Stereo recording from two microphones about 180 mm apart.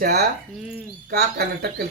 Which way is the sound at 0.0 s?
60° right (ahead or behind).